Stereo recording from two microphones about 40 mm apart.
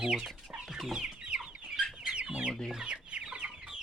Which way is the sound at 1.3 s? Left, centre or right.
Right.